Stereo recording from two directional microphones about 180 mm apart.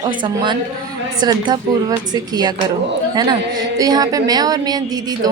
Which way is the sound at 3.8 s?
20° right (ahead or behind).